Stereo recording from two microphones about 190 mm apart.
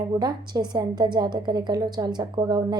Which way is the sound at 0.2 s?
20° right (ahead or behind).